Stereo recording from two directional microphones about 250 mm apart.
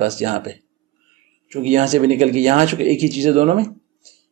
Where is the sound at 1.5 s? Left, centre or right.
Right.